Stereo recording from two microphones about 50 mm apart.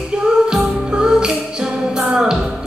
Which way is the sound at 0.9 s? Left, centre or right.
Centre.